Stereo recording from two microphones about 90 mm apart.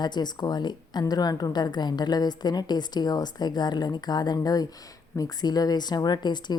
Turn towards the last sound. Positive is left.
turn(degrees=55)  # may be behind; listen again after turning